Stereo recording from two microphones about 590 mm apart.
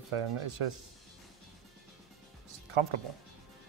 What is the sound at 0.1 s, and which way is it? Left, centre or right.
Speech, right.